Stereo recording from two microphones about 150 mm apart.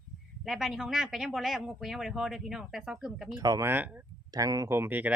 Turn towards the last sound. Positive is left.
turn(degrees=-10)  # may be behind; listen again after turning